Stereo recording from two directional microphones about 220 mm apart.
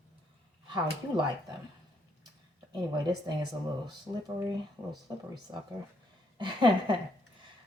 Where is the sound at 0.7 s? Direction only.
20° right (ahead or behind).